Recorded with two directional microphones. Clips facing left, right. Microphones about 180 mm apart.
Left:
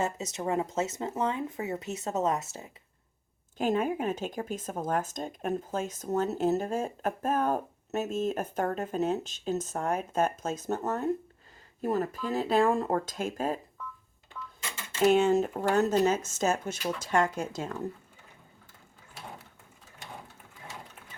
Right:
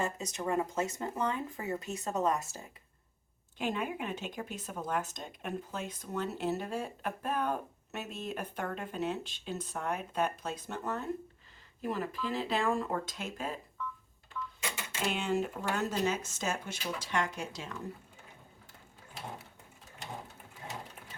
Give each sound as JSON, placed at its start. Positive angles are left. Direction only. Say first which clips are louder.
{"t": 0.0, "sound": "speech", "louder": "left 3 dB", "side_deg": 20}
{"t": 3.6, "sound": "speech", "louder": "left 7 dB", "side_deg": 45}
{"t": 15.0, "sound": "speech", "louder": "left 10 dB", "side_deg": 45}